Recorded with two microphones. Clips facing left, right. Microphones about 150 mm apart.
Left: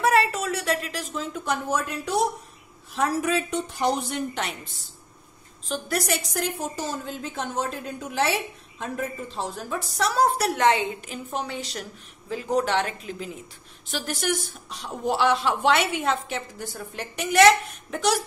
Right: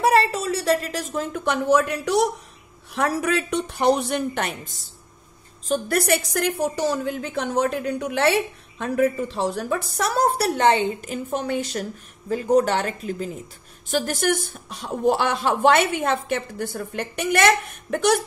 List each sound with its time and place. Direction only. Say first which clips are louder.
0.0 s a sound: right 3 dB; 30° right (ahead or behind); by 1.4 s 50° right (ahead or behind)
1.4 s speech: right 8 dB; 70° right (ahead or behind)
2.9 s a woman's voice: right 2 dB; 70° right (ahead or behind)